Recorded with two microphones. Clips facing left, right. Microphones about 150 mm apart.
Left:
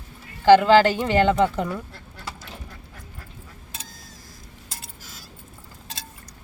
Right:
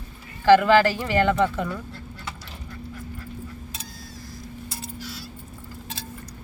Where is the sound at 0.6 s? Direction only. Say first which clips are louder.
Left 2 dB; 25° left (ahead or behind).